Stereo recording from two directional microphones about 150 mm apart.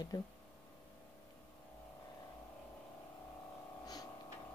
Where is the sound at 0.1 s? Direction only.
30° left (ahead or behind).